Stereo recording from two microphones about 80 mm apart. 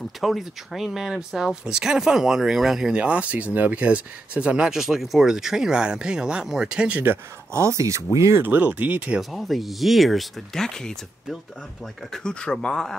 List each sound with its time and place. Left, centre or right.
0.2 s speech: centre
7.5 s speech: right
8.4 s speech: right
9.3 s speech: centre